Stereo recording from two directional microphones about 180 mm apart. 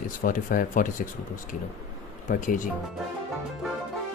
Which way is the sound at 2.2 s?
45° left (ahead or behind).